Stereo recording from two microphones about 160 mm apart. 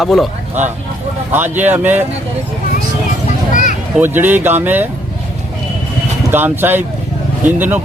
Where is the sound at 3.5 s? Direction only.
55° left (ahead or behind).